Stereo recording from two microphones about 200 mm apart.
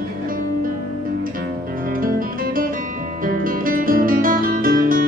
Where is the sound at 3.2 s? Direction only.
45° right (ahead or behind).